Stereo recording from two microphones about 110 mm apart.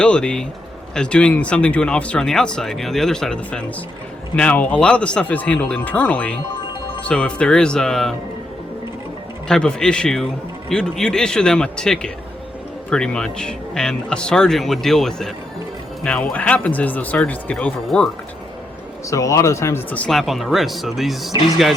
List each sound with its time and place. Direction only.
0.0 s speech: 10° left (ahead or behind)
9.5 s speech: 5° left (ahead or behind)
17.8 s speech: 5° left (ahead or behind)
19.1 s a man's voice: 30° left (ahead or behind)
19.9 s speech: 5° left (ahead or behind)